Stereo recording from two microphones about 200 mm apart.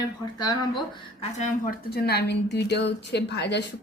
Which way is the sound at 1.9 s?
55° left (ahead or behind).